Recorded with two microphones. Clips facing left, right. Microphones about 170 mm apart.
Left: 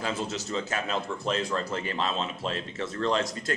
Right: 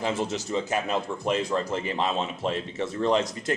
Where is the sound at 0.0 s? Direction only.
15° right (ahead or behind).